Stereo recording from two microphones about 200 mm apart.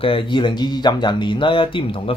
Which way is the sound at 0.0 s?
25° left (ahead or behind).